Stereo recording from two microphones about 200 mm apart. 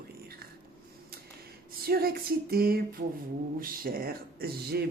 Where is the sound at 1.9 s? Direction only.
50° right (ahead or behind).